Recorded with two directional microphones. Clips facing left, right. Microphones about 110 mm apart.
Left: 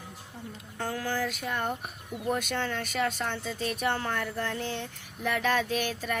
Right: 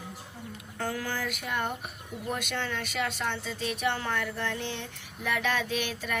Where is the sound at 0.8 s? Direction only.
30° left (ahead or behind).